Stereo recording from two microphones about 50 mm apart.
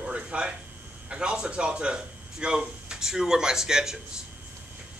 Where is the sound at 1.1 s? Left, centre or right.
Right.